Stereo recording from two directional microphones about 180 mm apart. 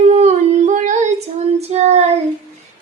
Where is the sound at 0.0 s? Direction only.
35° right (ahead or behind).